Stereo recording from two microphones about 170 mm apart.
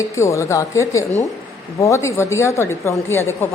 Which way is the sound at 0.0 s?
15° left (ahead or behind).